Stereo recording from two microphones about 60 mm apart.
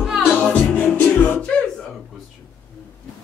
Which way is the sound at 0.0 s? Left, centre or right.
Centre.